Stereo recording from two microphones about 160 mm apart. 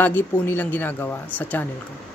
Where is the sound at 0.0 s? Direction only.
10° left (ahead or behind).